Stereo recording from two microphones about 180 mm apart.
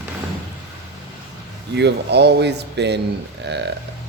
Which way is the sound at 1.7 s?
70° right (ahead or behind).